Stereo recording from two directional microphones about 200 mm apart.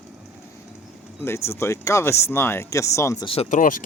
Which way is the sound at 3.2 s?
25° left (ahead or behind).